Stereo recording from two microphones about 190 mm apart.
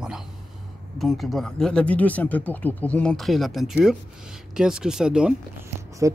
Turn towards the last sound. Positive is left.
turn(degrees=-15)  # may be behind; listen again after turning